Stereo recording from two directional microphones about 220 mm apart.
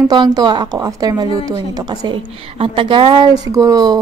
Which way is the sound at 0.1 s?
20° right (ahead or behind).